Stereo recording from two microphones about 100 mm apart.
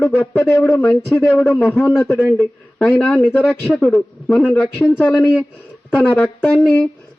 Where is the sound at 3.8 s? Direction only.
15° left (ahead or behind).